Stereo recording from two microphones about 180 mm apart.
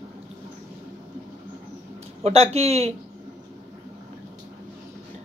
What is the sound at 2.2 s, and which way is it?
Speech, 35° right (ahead or behind).